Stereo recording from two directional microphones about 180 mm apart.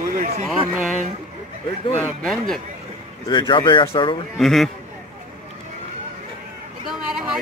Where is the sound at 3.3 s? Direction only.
25° left (ahead or behind).